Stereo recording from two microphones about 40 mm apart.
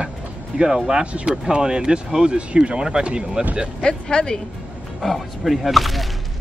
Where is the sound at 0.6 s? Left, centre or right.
Centre.